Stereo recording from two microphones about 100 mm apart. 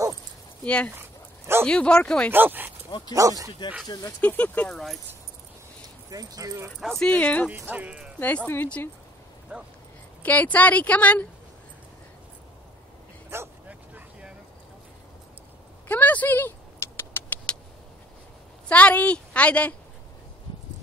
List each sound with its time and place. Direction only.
0.7 s a woman's voice: 10° left (ahead or behind)
2.3 s speech: 20° right (ahead or behind)
3.2 s speech: 35° right (ahead or behind)
4.2 s a woman's voice: 15° left (ahead or behind)
6.0 s speech: 35° right (ahead or behind)
6.8 s speech: centre (ahead or behind)
7.1 s a woman's voice: 15° left (ahead or behind)
7.5 s speech: 15° right (ahead or behind)
8.2 s a woman's voice: 15° left (ahead or behind)
9.5 s speech: 15° right (ahead or behind)
10.2 s a woman's voice: 15° left (ahead or behind)
13.3 s dog: 20° right (ahead or behind)
15.9 s a sound: 15° left (ahead or behind)
18.7 s a woman's voice: 15° left (ahead or behind)